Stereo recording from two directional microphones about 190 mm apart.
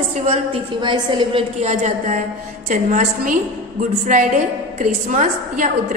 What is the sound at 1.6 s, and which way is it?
A woman's voice, 35° right (ahead or behind).